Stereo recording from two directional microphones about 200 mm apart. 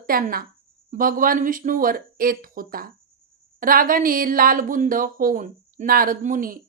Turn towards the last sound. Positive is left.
turn(degrees=-40)  # may be behind; listen again after turning